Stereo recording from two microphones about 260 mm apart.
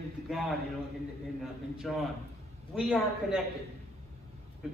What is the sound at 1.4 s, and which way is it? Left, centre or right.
A man's voice, centre.